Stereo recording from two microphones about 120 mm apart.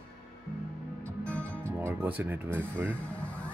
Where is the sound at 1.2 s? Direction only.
10° left (ahead or behind).